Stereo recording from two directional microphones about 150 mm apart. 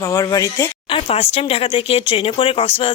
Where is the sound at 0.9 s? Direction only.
40° left (ahead or behind).